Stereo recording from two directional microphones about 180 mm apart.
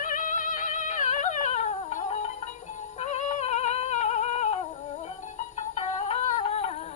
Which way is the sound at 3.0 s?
40° left (ahead or behind).